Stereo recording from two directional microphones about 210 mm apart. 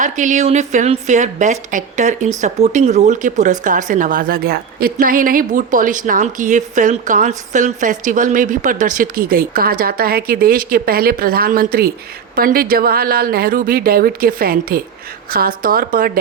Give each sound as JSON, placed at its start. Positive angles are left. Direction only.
{"t": 0.0, "sound": "a woman's voice", "side_deg": -35}